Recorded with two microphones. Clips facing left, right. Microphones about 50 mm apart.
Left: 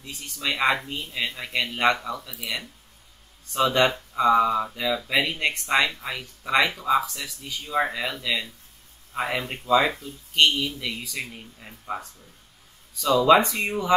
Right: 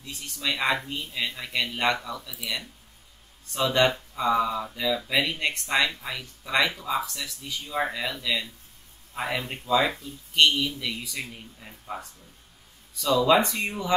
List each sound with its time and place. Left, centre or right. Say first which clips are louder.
0.1 s speech: left 1 dB; centre
0.5 s speech: left 3 dB; centre
13.6 s speech: left 4 dB; centre